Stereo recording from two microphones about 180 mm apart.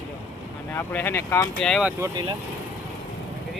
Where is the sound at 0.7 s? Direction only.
10° left (ahead or behind).